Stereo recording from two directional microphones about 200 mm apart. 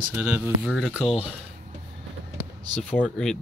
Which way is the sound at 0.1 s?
5° right (ahead or behind).